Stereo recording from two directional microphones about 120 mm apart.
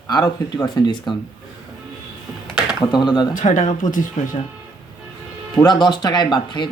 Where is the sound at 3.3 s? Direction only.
90° left.